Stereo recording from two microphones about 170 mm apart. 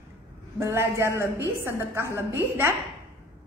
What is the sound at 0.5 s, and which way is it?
A woman's voice, 15° right (ahead or behind).